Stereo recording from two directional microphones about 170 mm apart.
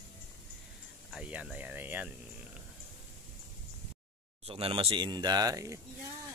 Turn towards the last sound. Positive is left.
turn(degrees=-20)  # may be behind; listen again after turning